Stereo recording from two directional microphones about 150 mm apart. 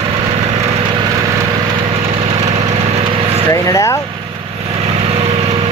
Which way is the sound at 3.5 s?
20° left (ahead or behind).